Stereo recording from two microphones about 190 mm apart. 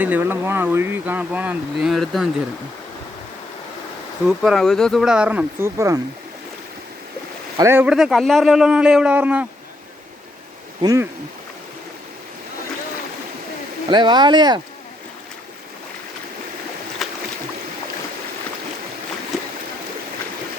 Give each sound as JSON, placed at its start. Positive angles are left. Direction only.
{"t": 0.0, "sound": "speech", "side_deg": -10}
{"t": 4.3, "sound": "a man's voice", "side_deg": 0}
{"t": 7.5, "sound": "a man's voice", "side_deg": -15}
{"t": 10.8, "sound": "speech", "side_deg": -15}
{"t": 13.9, "sound": "speech", "side_deg": -25}
{"t": 17.0, "sound": "boat", "side_deg": 0}